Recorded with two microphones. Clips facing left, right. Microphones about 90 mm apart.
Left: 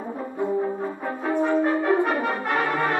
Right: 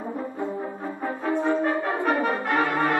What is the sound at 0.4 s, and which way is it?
French horn, 20° left (ahead or behind).